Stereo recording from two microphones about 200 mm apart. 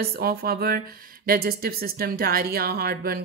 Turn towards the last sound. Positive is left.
turn(degrees=-50)  # may be behind; listen again after turning